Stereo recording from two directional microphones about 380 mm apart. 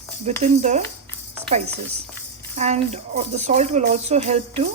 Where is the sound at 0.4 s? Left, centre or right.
Centre.